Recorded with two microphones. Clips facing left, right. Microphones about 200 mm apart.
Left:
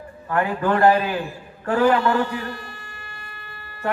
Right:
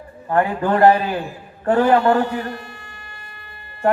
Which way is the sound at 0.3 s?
35° right (ahead or behind).